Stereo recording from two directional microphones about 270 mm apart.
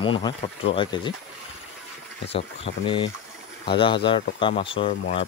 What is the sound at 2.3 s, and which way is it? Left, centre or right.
Speech, centre.